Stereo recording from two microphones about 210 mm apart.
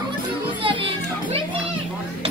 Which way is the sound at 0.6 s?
25° right (ahead or behind).